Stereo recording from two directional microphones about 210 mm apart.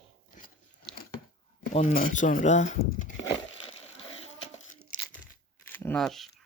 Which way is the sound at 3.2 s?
25° left (ahead or behind).